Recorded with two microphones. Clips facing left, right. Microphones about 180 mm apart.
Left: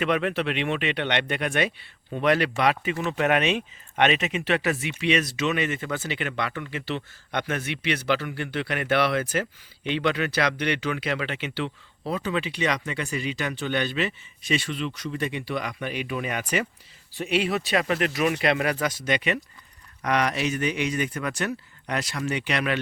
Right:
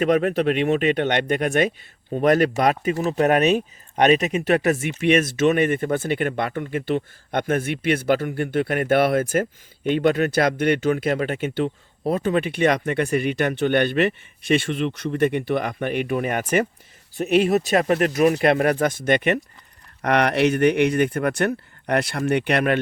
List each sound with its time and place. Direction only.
0.0 s speech: 40° right (ahead or behind)